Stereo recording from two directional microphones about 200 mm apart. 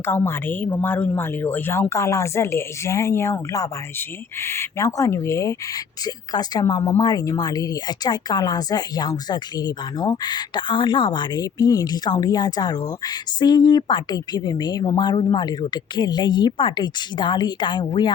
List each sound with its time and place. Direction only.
0.0 s a woman's voice: 10° left (ahead or behind)